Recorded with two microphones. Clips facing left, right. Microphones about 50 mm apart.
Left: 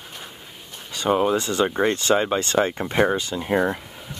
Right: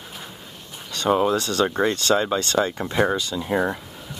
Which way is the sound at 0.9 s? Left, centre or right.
Centre.